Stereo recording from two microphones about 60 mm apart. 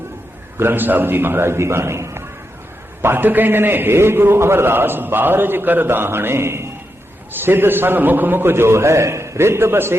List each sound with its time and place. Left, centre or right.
0.5 s a man's voice: right
3.0 s a man's voice: right